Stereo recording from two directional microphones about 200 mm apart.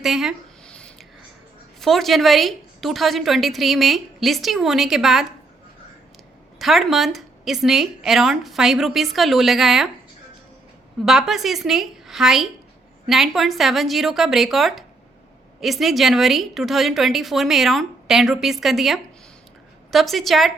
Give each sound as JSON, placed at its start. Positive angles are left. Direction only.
{"t": 0.0, "sound": "a sound", "side_deg": 0}
{"t": 1.8, "sound": "a woman's voice", "side_deg": 0}
{"t": 6.6, "sound": "a woman's voice", "side_deg": 0}
{"t": 11.0, "sound": "a woman's voice", "side_deg": 0}